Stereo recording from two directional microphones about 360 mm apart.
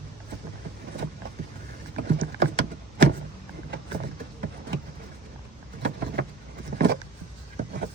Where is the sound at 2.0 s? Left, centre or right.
Right.